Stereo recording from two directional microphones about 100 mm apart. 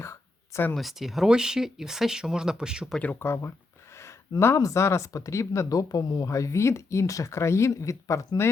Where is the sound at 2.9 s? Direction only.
15° left (ahead or behind).